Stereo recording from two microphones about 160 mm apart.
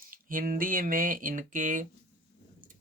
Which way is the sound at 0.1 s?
60° right (ahead or behind).